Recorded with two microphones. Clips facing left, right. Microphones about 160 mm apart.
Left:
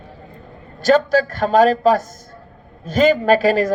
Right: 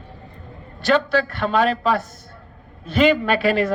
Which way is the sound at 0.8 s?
40° left (ahead or behind).